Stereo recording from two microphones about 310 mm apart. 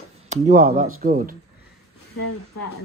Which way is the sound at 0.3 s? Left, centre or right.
Right.